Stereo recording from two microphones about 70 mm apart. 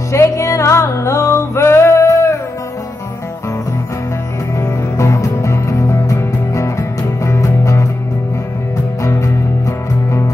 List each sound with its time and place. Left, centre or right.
0.1 s music: left
4.6 s music: left
9.0 s music: left